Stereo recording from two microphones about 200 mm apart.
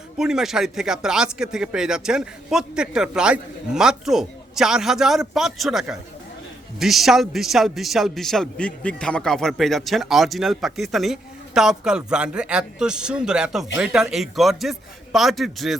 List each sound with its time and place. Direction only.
0.2 s a man's voice: 5° right (ahead or behind)